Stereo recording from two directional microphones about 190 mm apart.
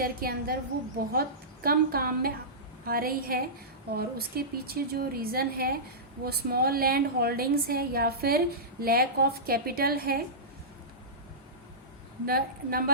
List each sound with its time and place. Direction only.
0.0 s a woman's voice: 50° right (ahead or behind)
1.6 s a woman's voice: 50° right (ahead or behind)
12.2 s a woman's voice: 50° right (ahead or behind)